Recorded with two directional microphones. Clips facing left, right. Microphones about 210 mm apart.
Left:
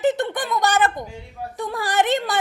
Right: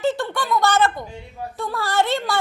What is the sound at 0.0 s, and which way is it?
Speech, 20° left (ahead or behind).